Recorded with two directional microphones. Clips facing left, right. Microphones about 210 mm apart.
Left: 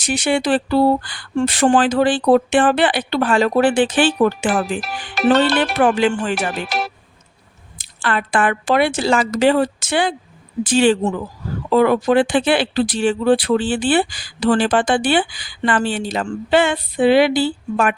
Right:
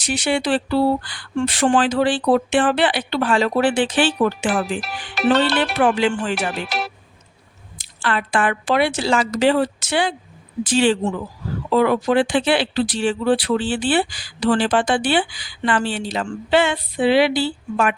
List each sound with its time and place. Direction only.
0.0 s speech: 50° left (ahead or behind)